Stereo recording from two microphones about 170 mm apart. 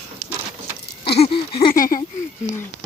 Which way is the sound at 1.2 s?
30° left (ahead or behind).